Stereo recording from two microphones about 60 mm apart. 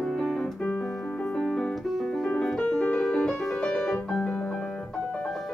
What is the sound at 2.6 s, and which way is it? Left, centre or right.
Music, centre.